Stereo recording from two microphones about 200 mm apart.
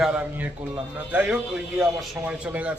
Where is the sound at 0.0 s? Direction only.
5° right (ahead or behind).